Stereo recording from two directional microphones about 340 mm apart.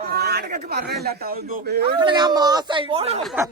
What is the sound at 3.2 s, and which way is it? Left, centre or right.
Speech, centre.